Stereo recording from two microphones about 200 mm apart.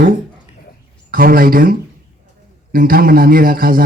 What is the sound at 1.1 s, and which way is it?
Speech, 45° right (ahead or behind).